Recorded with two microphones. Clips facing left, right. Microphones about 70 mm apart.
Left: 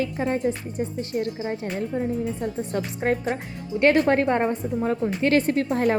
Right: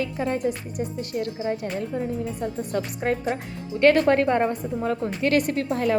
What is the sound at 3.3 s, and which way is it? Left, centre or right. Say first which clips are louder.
A woman's voice: left 1 dB; left.